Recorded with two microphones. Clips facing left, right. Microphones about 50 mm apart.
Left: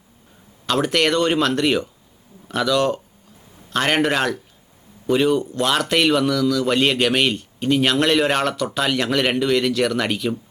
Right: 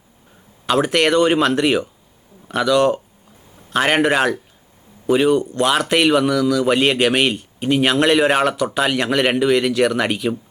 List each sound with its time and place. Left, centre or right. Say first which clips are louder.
0.7 s a man's voice: right 3 dB; centre